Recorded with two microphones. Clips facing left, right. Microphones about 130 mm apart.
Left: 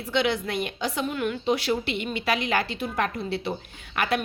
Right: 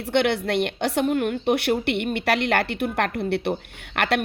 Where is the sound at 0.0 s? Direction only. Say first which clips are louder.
Right 4 dB; 65° right (ahead or behind).